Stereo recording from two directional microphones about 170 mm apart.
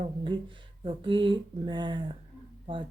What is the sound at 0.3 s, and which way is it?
Speech, 30° right (ahead or behind).